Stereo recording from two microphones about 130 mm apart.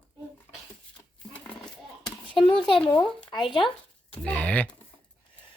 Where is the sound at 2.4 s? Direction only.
35° left (ahead or behind).